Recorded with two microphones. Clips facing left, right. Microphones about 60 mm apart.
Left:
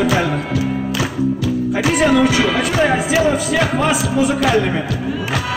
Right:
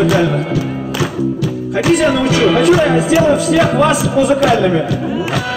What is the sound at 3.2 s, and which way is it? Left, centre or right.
Music, centre.